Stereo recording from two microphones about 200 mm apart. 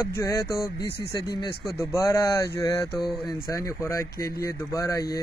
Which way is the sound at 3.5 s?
15° left (ahead or behind).